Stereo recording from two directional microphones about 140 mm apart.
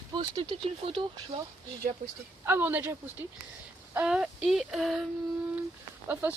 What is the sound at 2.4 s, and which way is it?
Speech, 15° right (ahead or behind).